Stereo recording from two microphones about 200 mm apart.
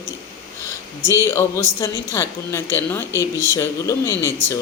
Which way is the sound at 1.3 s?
15° left (ahead or behind).